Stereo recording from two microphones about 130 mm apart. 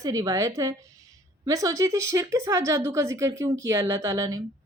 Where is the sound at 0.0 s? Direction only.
25° right (ahead or behind).